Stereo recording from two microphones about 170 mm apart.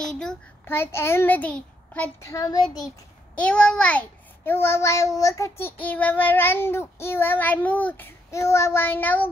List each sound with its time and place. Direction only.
0.0 s a child's voice: 5° left (ahead or behind)
2.3 s a child's voice: 25° left (ahead or behind)
3.3 s child singing: 5° left (ahead or behind)